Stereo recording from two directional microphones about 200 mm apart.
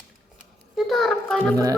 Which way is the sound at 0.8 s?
Centre (ahead or behind).